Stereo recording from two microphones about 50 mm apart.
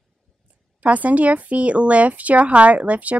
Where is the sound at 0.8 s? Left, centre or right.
Right.